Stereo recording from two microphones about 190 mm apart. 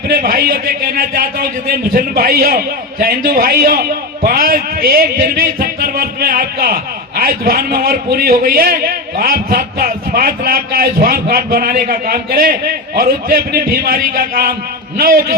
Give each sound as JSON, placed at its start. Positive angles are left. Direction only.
{"t": 0.1, "sound": "a man's voice", "side_deg": -50}